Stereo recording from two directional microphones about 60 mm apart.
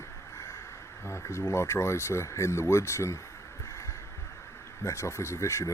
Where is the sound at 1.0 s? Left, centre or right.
Left.